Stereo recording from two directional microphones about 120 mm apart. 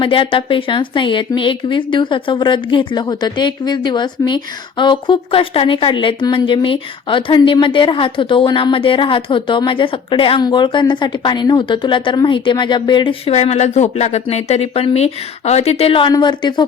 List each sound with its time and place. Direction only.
0.0 s a woman's voice: 45° left (ahead or behind)
13.3 s a woman's voice: 65° left (ahead or behind); by 16.6 s 40° left (ahead or behind)